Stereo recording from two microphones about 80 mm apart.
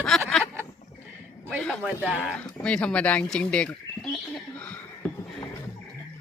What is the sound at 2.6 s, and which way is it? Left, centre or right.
Speech, centre.